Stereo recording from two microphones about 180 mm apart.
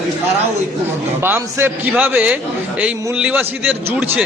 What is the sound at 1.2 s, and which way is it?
A man's voice, 10° right (ahead or behind).